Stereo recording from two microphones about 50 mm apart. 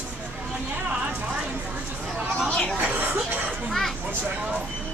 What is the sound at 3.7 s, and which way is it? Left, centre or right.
Speech, centre.